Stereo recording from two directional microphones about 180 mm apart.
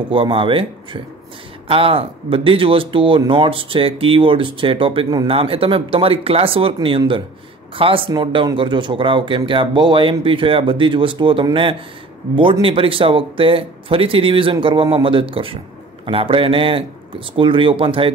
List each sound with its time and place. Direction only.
0.1 s a man's voice: 30° right (ahead or behind)